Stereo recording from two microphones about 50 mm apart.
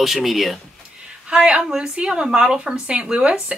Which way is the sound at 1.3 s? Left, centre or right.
Right.